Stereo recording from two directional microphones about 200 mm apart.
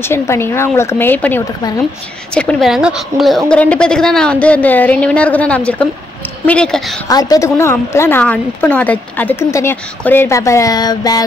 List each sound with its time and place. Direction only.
0.1 s a woman's voice: 10° left (ahead or behind)
7.1 s a woman's voice: 20° left (ahead or behind)